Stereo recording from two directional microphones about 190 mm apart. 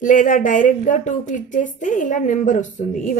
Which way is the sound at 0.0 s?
45° left (ahead or behind).